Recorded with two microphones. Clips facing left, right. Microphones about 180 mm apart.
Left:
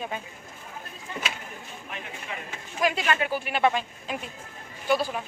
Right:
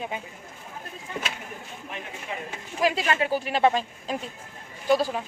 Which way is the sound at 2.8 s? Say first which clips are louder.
Right 1 dB; 30° right (ahead or behind).